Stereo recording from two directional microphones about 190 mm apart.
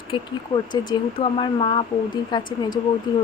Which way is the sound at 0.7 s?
25° left (ahead or behind).